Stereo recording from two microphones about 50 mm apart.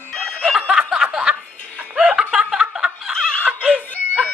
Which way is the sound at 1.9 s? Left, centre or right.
Right.